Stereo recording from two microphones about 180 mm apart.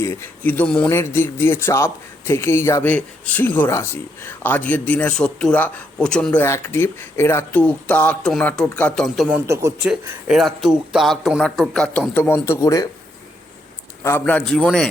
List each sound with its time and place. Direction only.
0.0 s speech: 15° left (ahead or behind)
9.3 s speech: 15° right (ahead or behind)
10.2 s a man's voice: centre (ahead or behind); by 12.9 s 20° left (ahead or behind)
14.0 s speech: 10° left (ahead or behind)